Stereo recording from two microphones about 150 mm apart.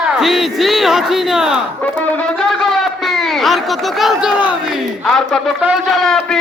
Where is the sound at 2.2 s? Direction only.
Centre (ahead or behind).